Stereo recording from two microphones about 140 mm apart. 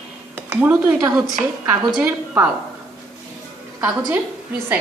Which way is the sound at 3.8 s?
15° right (ahead or behind).